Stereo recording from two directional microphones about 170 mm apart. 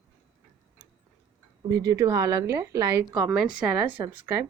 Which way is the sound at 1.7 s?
20° right (ahead or behind).